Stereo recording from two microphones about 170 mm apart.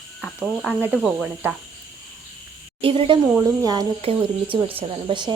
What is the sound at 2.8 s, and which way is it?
Speech, 30° right (ahead or behind).